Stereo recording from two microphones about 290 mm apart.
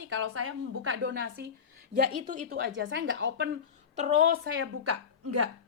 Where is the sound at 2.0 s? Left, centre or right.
Right.